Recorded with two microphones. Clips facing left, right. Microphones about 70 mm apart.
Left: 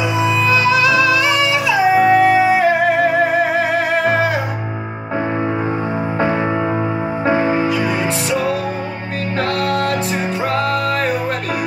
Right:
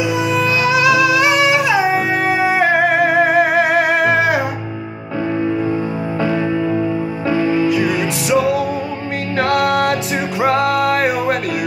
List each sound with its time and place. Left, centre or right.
0.5 s music: centre
2.0 s music: centre
6.1 s music: left
9.4 s music: left